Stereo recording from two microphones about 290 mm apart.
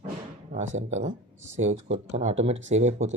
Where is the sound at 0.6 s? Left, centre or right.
Right.